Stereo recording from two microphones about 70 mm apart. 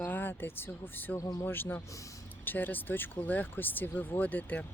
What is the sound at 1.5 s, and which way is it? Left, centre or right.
Speech, left.